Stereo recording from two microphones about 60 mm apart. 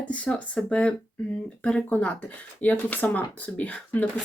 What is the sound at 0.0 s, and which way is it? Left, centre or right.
Speech, left.